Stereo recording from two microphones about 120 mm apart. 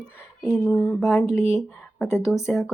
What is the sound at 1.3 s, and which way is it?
Speech, 25° left (ahead or behind).